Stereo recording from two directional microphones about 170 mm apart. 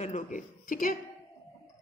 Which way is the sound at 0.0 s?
50° left (ahead or behind).